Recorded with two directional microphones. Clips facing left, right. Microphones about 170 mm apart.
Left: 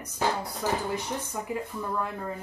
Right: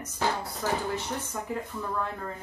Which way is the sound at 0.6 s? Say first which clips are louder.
Left 1 dB; 15° left (ahead or behind).